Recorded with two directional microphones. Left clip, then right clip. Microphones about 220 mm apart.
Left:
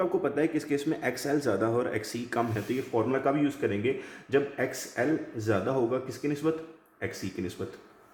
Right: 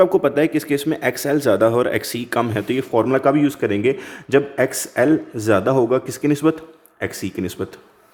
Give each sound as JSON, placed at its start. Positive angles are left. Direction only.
{"t": 0.0, "sound": "speech", "side_deg": -45}